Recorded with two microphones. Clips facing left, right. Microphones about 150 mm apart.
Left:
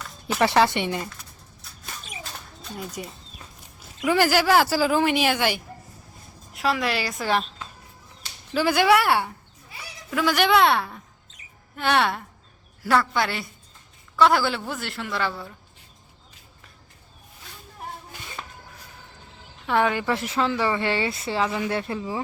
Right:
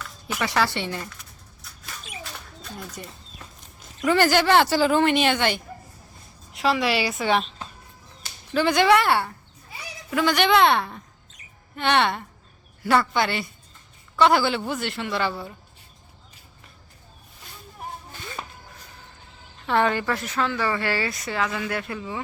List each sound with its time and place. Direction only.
0.3 s speech: 30° left (ahead or behind)
2.7 s a woman's voice: 10° left (ahead or behind)
8.5 s a woman's voice: 5° left (ahead or behind)
19.6 s speech: 10° left (ahead or behind)
20.1 s speech: 25° left (ahead or behind)